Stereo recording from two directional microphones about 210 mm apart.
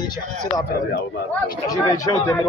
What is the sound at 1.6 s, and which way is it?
Speech, 15° left (ahead or behind).